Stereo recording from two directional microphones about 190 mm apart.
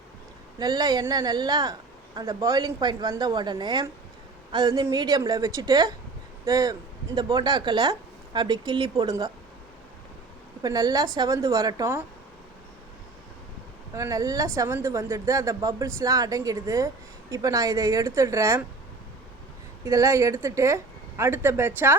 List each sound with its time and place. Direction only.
0.6 s speech: 20° right (ahead or behind)
10.6 s speech: 20° right (ahead or behind)
13.9 s speech: 15° right (ahead or behind)
19.8 s speech: 15° right (ahead or behind)